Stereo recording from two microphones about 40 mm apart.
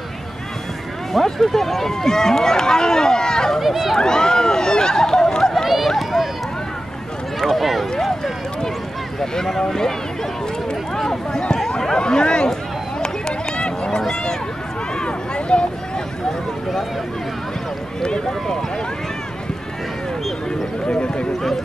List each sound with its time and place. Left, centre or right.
1.1 s speech: centre
3.6 s speech: centre
4.0 s speech: centre
5.5 s run: centre
7.3 s speech: centre
9.2 s speech: centre
11.0 s a sound: centre
11.8 s speech: centre
13.0 s run: left
15.0 s speech: left
18.0 s speech: left
20.9 s speech: left